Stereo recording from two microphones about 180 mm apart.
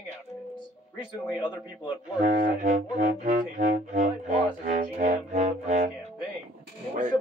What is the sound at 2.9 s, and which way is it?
Speech, 40° right (ahead or behind).